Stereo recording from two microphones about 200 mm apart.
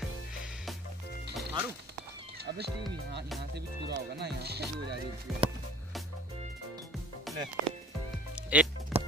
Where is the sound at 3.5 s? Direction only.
55° right (ahead or behind).